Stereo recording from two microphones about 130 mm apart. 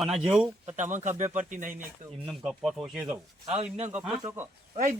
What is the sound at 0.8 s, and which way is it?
Speech, 70° right (ahead or behind).